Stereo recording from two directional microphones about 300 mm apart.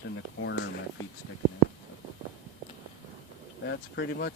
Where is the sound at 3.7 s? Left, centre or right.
Left.